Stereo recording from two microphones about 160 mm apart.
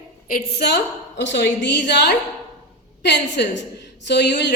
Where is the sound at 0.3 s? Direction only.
70° left (ahead or behind).